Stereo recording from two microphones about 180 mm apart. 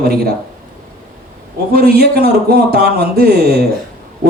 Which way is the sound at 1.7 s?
55° right (ahead or behind).